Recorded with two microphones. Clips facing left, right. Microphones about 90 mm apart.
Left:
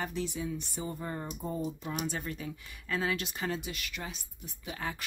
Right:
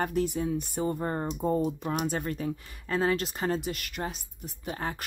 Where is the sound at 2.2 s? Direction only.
45° right (ahead or behind).